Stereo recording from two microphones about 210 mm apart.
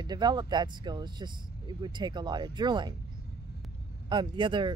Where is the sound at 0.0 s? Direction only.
20° right (ahead or behind).